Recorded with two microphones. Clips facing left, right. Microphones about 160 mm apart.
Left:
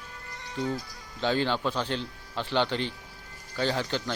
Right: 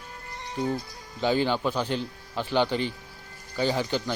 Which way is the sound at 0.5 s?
35° right (ahead or behind).